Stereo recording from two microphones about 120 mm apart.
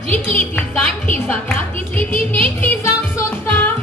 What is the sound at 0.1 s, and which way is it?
Music, 15° left (ahead or behind).